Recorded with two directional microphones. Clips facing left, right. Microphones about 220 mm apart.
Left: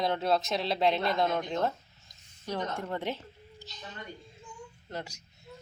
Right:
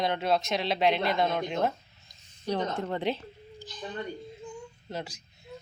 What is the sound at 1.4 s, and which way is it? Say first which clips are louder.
Speech: right 2 dB; 15° right (ahead or behind).